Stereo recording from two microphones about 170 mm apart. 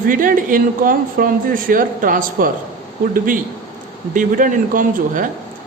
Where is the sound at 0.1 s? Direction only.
55° right (ahead or behind).